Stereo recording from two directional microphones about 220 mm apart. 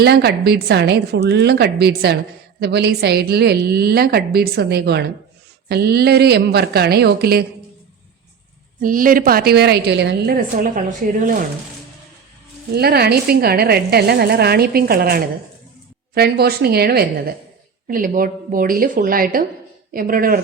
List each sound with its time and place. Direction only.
0.0 s a woman's voice: 45° right (ahead or behind)
8.8 s a woman's voice: 40° right (ahead or behind)
12.7 s a woman's voice: 45° right (ahead or behind)